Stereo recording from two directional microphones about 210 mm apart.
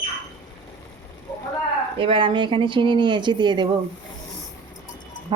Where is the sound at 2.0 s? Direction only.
25° right (ahead or behind).